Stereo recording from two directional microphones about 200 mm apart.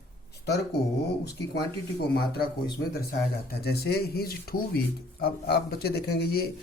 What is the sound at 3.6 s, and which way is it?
Speech, 50° left (ahead or behind).